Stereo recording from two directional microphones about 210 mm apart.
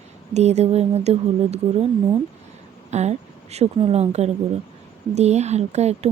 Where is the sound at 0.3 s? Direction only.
30° right (ahead or behind).